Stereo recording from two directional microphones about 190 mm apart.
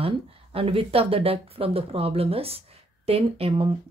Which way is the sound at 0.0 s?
30° right (ahead or behind).